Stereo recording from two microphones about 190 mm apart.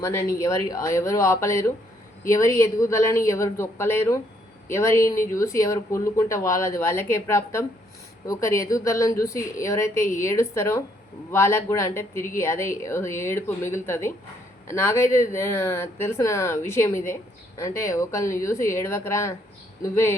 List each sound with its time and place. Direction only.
0.0 s speech: 15° left (ahead or behind)